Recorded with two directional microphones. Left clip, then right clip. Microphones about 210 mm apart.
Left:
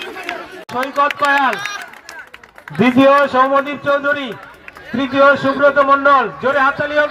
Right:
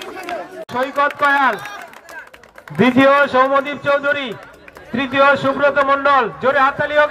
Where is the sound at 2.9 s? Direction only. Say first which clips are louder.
Left 2 dB; 5° left (ahead or behind).